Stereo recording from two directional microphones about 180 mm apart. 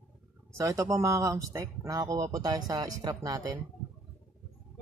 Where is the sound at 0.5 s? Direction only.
15° right (ahead or behind).